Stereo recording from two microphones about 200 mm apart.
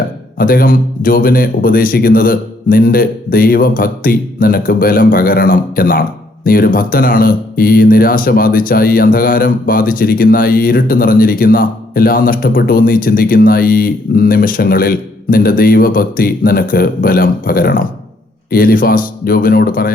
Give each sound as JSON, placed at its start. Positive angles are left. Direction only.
{"t": 0.3, "sound": "a man's voice", "side_deg": 45}